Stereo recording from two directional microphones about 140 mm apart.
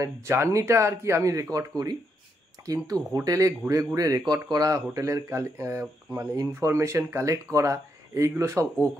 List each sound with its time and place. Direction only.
0.0 s speech: 20° right (ahead or behind)